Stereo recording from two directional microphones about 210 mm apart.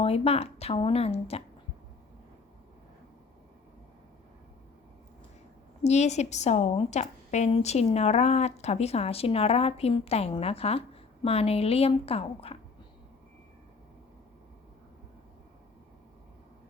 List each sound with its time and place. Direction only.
0.0 s a woman's voice: 30° left (ahead or behind)
5.8 s a woman's voice: 30° left (ahead or behind)